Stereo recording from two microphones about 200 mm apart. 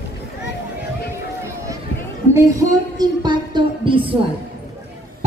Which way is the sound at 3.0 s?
20° right (ahead or behind).